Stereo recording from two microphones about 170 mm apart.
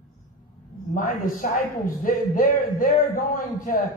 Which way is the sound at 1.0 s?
50° left (ahead or behind).